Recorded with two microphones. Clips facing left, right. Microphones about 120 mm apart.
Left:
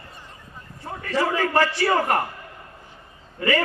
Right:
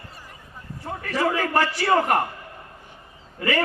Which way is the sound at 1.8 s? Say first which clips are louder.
Right 1 dB; 25° right (ahead or behind).